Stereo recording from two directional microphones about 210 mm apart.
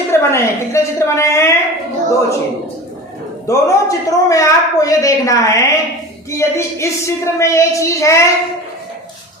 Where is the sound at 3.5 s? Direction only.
15° left (ahead or behind).